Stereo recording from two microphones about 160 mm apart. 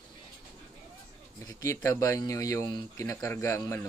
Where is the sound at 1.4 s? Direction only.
20° left (ahead or behind).